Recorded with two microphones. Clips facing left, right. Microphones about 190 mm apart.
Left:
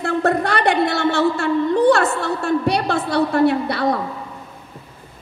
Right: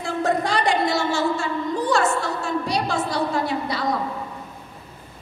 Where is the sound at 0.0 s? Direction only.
60° left (ahead or behind).